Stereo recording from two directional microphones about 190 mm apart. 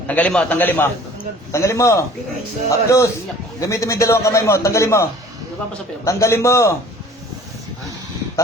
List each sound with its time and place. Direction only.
0.1 s a man's voice: 5° left (ahead or behind)
6.1 s a man's voice: 15° left (ahead or behind)